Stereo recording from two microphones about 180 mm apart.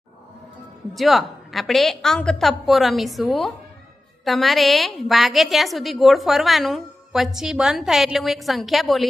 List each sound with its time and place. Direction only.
0.9 s a woman's voice: centre (ahead or behind)